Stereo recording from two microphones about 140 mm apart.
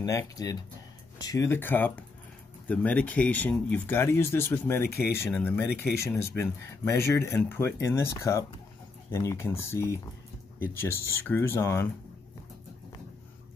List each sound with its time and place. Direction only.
0.0 s speech: 25° left (ahead or behind)